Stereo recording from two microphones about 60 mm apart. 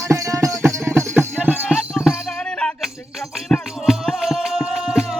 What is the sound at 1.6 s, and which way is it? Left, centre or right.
Music, centre.